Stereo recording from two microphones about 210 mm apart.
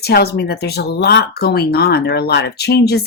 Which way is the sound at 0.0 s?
50° left (ahead or behind).